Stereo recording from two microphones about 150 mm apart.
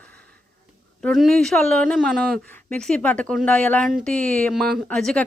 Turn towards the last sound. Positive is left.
turn(degrees=5)  # may be behind; listen again after turning